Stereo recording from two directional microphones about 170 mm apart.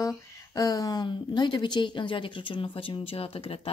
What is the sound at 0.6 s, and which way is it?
Speech, 20° left (ahead or behind).